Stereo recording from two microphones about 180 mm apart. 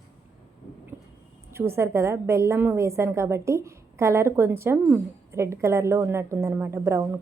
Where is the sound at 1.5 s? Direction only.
15° right (ahead or behind).